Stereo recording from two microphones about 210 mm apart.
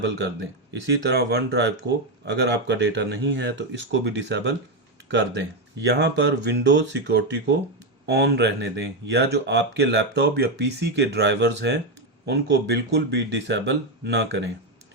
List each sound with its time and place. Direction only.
0.0 s speech: 55° right (ahead or behind)
5.8 s speech: 55° right (ahead or behind)